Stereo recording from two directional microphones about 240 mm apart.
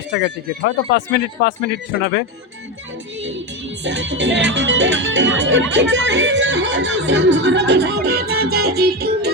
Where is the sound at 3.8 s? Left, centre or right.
Right.